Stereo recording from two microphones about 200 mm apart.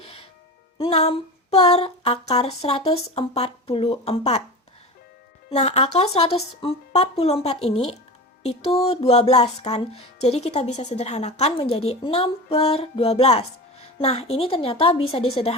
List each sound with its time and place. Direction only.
0.8 s music: 30° left (ahead or behind)
5.5 s music: 30° left (ahead or behind)
14.0 s a woman's voice: 30° left (ahead or behind)